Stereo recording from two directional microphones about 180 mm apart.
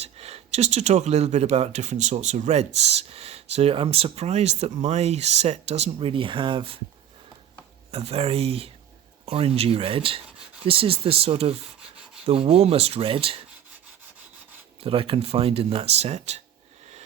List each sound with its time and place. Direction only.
0.0 s speech: 35° right (ahead or behind)
7.9 s speech: 35° right (ahead or behind)
14.8 s speech: 30° right (ahead or behind)